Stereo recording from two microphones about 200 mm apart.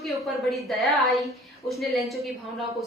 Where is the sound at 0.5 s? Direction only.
Centre (ahead or behind).